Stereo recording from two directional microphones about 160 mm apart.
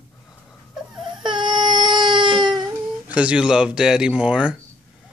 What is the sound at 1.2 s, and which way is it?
Baby cry, 30° right (ahead or behind).